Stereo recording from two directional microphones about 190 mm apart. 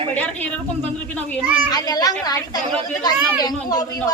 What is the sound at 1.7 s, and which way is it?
A woman's voice, 20° left (ahead or behind).